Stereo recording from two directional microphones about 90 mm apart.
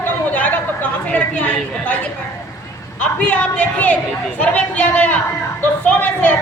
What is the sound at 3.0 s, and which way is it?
A woman's voice, 15° left (ahead or behind).